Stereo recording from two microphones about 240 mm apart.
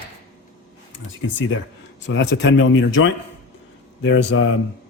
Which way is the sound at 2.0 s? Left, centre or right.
Left.